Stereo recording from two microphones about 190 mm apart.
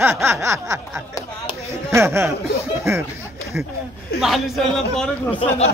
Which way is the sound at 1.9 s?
15° right (ahead or behind).